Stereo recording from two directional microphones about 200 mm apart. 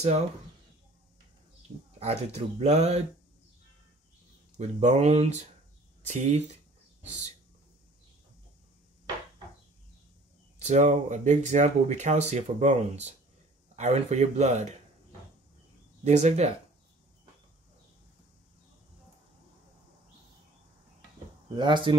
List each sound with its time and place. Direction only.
2.0 s speech: 30° right (ahead or behind)
4.6 s speech: 35° right (ahead or behind)
10.6 s speech: 35° right (ahead or behind)
16.0 s speech: 35° right (ahead or behind)
21.5 s speech: 25° right (ahead or behind)